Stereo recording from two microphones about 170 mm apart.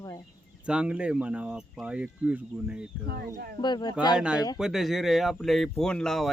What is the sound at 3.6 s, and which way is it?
Speech, 25° left (ahead or behind).